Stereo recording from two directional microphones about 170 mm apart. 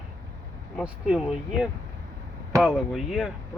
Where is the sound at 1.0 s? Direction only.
5° right (ahead or behind).